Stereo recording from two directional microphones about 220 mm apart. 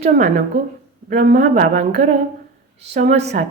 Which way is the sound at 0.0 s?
35° right (ahead or behind).